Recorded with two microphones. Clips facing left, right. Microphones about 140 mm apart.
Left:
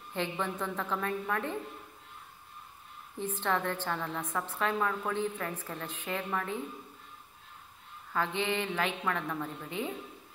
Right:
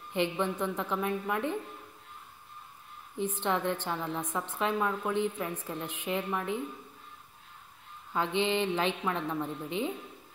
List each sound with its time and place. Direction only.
0.1 s a woman's voice: 20° right (ahead or behind)
3.3 s a woman's voice: 20° right (ahead or behind)
8.1 s a woman's voice: 20° right (ahead or behind)